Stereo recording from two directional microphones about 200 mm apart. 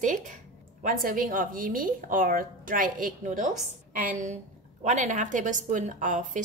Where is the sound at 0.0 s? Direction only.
40° right (ahead or behind).